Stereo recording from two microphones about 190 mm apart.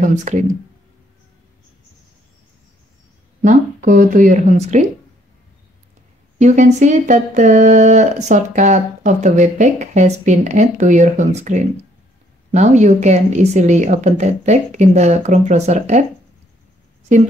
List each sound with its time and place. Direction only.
0.0 s speech: 40° right (ahead or behind)
3.4 s speech: 45° right (ahead or behind)
6.4 s speech: 40° right (ahead or behind)